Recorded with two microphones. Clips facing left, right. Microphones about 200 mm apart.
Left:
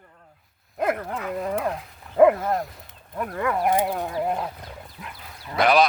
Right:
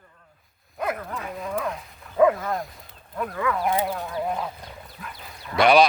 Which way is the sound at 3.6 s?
55° left (ahead or behind).